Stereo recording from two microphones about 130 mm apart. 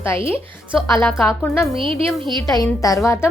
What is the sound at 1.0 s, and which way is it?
Speech, centre (ahead or behind).